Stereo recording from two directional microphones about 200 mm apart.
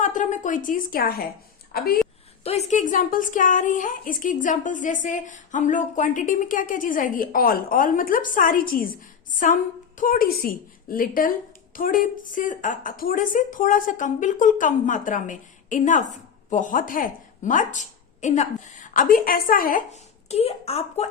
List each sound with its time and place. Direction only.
0.0 s a woman's voice: 40° left (ahead or behind)
2.4 s a woman's voice: 30° left (ahead or behind)
10.0 s a woman's voice: 45° left (ahead or behind)